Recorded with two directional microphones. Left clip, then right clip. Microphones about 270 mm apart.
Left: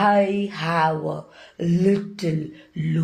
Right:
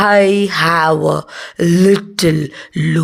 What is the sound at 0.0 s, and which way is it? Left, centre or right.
Gasp, right.